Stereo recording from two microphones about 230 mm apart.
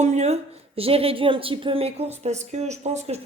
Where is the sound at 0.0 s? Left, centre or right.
Right.